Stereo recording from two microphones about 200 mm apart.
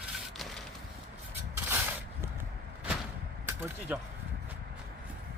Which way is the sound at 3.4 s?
10° right (ahead or behind).